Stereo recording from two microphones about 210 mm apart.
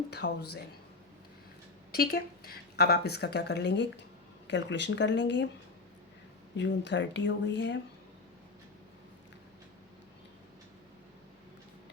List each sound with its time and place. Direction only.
0.2 s speech: 55° left (ahead or behind)
1.9 s speech: 45° left (ahead or behind)
6.6 s speech: 60° left (ahead or behind)